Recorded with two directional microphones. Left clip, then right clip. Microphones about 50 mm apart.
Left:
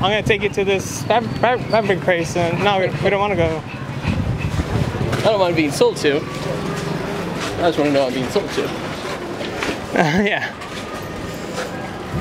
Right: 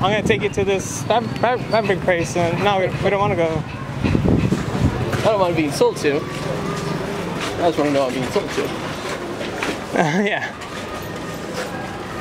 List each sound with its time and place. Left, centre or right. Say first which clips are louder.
0.0 s speech: left 1 dB; centre
5.3 s speech: left 1 dB; left
7.6 s speech: left 1 dB; left
9.6 s a sound: left 1 dB; centre